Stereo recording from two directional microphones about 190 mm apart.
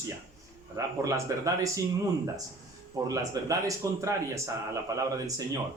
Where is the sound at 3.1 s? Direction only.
15° right (ahead or behind).